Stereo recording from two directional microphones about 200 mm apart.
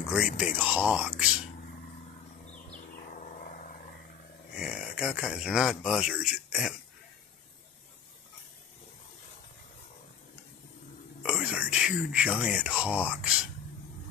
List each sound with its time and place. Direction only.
0.4 s speech: 5° right (ahead or behind)
3.3 s vehicle: 40° left (ahead or behind)
4.6 s speech: 5° right (ahead or behind)
11.2 s whispering: 5° right (ahead or behind)